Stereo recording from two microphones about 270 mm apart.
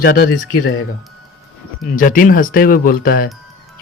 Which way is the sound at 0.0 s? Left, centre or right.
Left.